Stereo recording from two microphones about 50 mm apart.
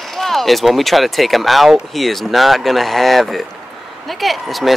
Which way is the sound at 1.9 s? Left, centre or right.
Centre.